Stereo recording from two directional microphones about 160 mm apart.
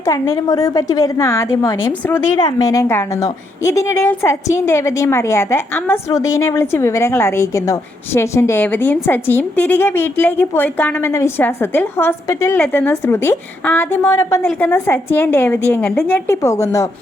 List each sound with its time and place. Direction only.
0.0 s a woman's voice: 20° left (ahead or behind)